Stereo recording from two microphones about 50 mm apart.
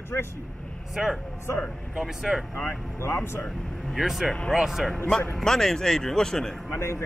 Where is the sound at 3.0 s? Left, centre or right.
Left.